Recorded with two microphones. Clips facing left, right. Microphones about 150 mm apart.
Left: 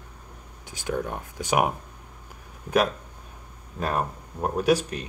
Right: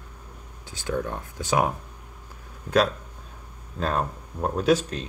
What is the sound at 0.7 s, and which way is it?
Speech, 15° left (ahead or behind).